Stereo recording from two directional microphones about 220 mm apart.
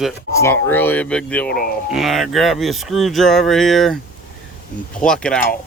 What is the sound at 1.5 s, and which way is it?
Speech, 45° left (ahead or behind).